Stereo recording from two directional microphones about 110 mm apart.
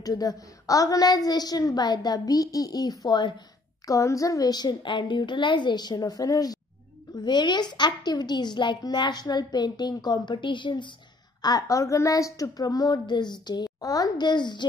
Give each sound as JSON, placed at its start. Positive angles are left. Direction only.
{"t": 0.0, "sound": "a child's voice", "side_deg": 35}
{"t": 3.8, "sound": "a child's voice", "side_deg": 30}
{"t": 11.4, "sound": "a child's voice", "side_deg": 30}